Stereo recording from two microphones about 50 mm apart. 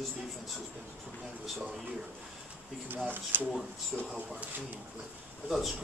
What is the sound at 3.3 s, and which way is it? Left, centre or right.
Speech, right.